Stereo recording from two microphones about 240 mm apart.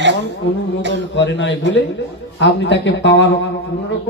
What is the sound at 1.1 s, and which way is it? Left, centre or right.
A woman's voice, left.